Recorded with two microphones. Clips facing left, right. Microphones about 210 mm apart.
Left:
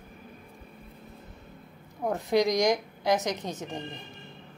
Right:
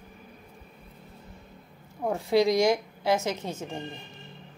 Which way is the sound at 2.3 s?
15° left (ahead or behind).